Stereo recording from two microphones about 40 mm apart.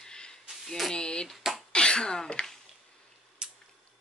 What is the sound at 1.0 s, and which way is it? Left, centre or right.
Speech, left.